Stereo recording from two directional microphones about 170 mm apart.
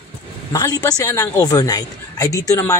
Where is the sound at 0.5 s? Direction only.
20° left (ahead or behind).